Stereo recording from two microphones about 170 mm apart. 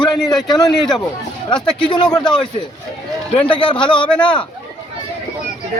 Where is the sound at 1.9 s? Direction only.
25° left (ahead or behind).